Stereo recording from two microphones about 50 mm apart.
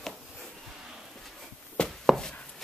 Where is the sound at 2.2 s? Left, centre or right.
Centre.